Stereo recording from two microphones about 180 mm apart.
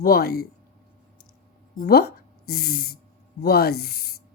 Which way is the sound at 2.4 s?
60° left (ahead or behind).